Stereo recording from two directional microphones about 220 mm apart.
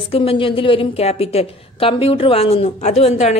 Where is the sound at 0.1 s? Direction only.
25° left (ahead or behind).